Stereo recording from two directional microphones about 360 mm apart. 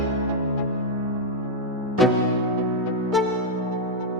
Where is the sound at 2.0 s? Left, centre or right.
Centre.